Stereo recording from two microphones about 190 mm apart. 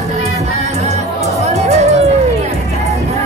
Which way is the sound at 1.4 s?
35° right (ahead or behind).